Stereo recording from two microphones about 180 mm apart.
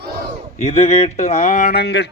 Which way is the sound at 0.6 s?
35° left (ahead or behind).